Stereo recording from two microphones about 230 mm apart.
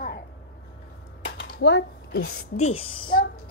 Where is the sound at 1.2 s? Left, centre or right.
Left.